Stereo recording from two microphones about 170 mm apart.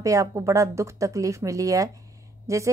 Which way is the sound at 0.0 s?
20° right (ahead or behind).